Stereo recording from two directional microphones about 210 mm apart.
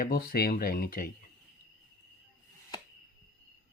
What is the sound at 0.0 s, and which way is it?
Speech, 45° left (ahead or behind).